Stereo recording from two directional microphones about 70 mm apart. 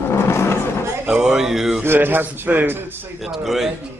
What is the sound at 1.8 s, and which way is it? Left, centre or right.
A man's voice, right.